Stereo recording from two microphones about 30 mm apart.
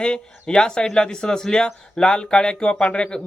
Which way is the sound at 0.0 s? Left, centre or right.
Left.